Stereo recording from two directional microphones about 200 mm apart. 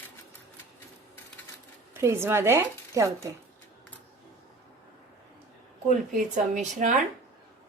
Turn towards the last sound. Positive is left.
turn(degrees=-40)  # may be behind; listen again after turning